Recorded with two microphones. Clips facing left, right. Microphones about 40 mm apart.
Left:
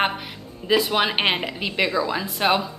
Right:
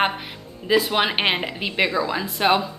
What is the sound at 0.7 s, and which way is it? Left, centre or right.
A woman's voice, centre.